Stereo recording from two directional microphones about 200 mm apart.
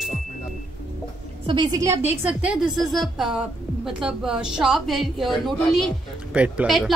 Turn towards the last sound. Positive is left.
turn(degrees=0)  # may be behind; listen again after turning